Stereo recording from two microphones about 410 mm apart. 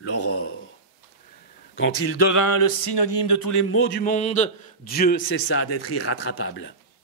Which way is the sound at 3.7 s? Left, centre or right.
Left.